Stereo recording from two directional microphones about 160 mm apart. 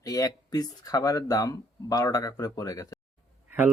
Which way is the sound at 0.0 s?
20° left (ahead or behind).